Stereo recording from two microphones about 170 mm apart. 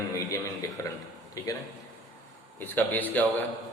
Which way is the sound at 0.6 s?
20° left (ahead or behind).